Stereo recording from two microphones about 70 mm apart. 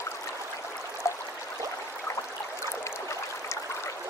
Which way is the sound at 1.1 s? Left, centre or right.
Left.